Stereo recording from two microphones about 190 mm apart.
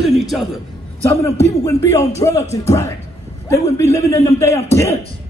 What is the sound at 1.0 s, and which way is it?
A man's voice, 15° left (ahead or behind).